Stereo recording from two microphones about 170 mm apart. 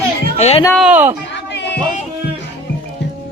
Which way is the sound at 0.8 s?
10° right (ahead or behind).